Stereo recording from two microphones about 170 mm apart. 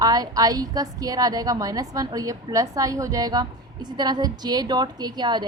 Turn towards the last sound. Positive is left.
turn(degrees=-25)  # may be behind; listen again after turning